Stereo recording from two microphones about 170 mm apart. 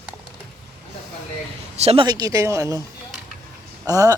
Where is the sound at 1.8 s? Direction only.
35° right (ahead or behind).